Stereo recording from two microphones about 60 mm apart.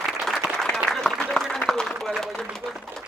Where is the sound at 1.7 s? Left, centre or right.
Centre.